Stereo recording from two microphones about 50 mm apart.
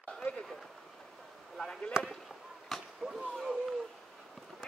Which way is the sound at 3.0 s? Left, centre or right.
Centre.